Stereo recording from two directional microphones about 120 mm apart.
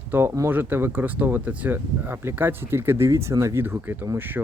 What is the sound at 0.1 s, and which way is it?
Speech, 20° right (ahead or behind).